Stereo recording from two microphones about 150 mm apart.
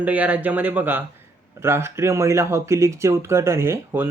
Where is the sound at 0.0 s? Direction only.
10° right (ahead or behind).